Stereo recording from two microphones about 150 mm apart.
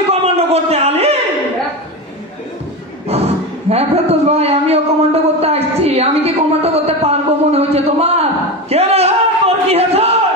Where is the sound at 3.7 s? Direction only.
45° right (ahead or behind).